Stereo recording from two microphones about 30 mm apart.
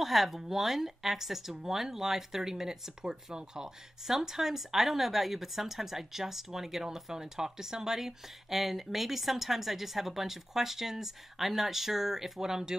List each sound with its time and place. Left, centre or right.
0.0 s speech: centre
1.5 s speech: right